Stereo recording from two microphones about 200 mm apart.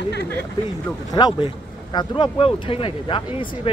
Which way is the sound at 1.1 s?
25° left (ahead or behind).